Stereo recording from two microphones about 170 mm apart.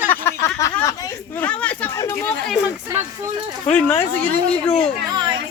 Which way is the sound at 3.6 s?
10° left (ahead or behind).